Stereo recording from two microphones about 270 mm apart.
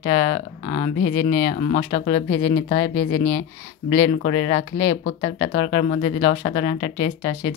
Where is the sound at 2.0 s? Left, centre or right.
Left.